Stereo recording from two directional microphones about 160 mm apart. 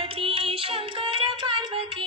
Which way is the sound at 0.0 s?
35° right (ahead or behind).